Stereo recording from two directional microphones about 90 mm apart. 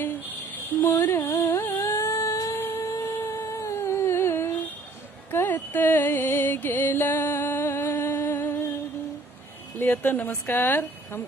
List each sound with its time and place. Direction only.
0.8 s a sound: 25° left (ahead or behind)
2.9 s music: 35° left (ahead or behind)
9.7 s a woman's voice: 25° left (ahead or behind)